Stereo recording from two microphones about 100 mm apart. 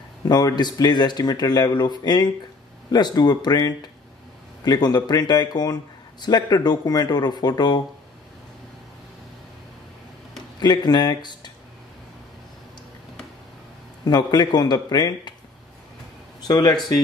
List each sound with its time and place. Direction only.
0.2 s speech: 40° left (ahead or behind)
10.6 s speech: 45° left (ahead or behind)
14.0 s speech: 45° left (ahead or behind)
16.4 s speech: 45° left (ahead or behind)